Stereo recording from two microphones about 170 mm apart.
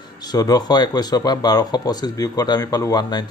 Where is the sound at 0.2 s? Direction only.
25° left (ahead or behind).